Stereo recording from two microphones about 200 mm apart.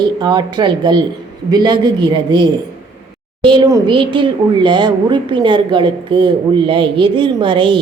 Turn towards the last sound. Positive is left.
turn(degrees=-25)  # may be behind; listen again after turning